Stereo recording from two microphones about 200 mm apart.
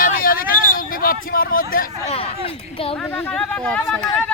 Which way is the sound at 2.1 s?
30° left (ahead or behind).